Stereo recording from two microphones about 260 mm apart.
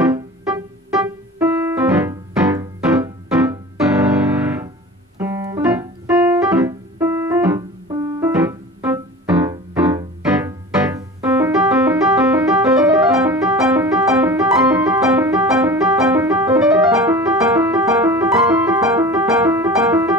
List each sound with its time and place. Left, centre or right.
0.1 s music: centre
4.4 s piano: centre